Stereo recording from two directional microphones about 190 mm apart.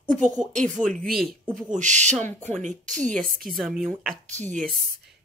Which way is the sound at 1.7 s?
40° right (ahead or behind).